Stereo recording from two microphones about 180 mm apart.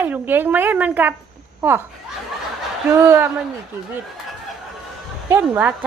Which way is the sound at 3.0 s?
10° right (ahead or behind).